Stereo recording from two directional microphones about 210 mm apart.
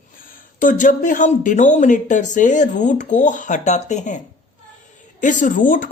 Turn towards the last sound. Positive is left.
turn(degrees=40)  # may be behind; listen again after turning